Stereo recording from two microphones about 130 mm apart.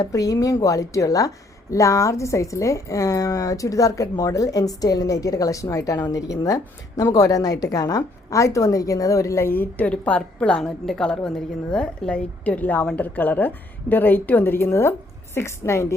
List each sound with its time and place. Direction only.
0.0 s a woman's voice: 25° left (ahead or behind)